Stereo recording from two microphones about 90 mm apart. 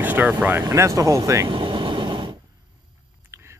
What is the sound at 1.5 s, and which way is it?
Vehicle, 70° right (ahead or behind).